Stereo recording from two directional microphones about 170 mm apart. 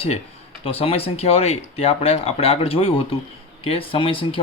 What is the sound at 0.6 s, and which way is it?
Speech, 35° left (ahead or behind).